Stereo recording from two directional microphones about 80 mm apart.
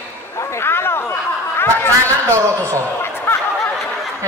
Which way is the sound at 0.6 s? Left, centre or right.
Left.